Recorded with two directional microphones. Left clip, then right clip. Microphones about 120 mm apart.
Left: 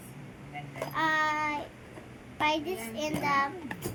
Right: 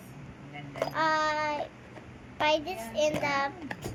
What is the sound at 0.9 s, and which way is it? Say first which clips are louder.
A child's voice: even; 25° left (ahead or behind).